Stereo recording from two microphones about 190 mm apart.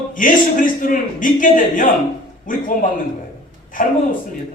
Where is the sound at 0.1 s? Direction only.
45° left (ahead or behind).